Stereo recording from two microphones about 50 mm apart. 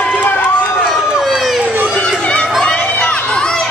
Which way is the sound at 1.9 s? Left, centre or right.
Left.